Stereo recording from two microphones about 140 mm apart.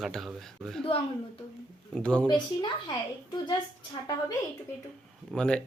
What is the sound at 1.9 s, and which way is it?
Speech, 5° left (ahead or behind).